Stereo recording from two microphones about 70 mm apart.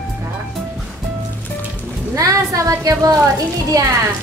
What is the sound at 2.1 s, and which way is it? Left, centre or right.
Music, right.